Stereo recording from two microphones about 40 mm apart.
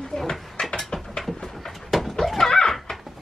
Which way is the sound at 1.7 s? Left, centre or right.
Centre.